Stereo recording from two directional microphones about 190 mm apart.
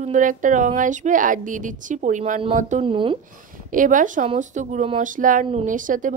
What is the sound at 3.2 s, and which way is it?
Speech, 45° right (ahead or behind).